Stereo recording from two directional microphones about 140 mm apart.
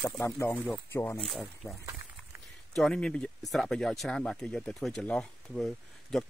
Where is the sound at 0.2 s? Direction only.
15° left (ahead or behind).